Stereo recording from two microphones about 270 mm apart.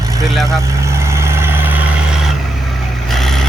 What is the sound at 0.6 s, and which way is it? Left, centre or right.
Vehicle, centre.